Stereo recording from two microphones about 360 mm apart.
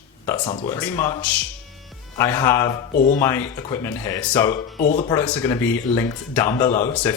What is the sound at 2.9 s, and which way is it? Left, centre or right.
Speech, left.